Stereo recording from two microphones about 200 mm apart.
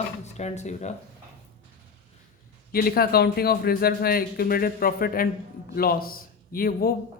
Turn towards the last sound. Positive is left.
turn(degrees=45)  # may be behind; listen again after turning